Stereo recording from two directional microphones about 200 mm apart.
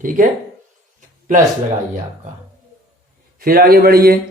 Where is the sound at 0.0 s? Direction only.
40° right (ahead or behind).